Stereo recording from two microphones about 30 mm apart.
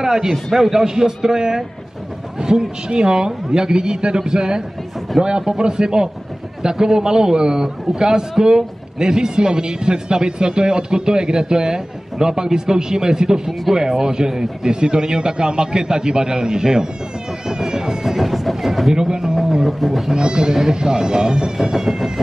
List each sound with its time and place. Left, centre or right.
0.0 s a man's voice: centre
2.4 s a man's voice: right
17.5 s music: centre
18.0 s a sound: centre
18.9 s a man's voice: right
19.6 s speech: centre
20.2 s a man's voice: right
21.5 s a man's voice: centre